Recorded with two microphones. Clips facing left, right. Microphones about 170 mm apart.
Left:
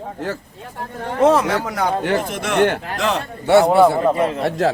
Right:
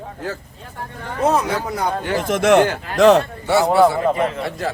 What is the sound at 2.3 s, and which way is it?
Speech, 55° right (ahead or behind).